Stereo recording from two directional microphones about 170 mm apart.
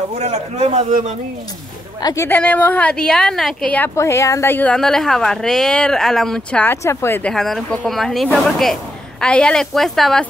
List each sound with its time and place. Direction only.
0.1 s a man's voice: 40° right (ahead or behind)
2.0 s speech: 20° left (ahead or behind)
2.2 s a woman's voice: 10° left (ahead or behind)